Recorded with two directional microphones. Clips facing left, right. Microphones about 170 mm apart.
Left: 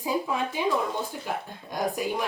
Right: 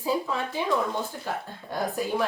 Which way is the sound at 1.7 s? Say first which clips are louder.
Even; 15° left (ahead or behind).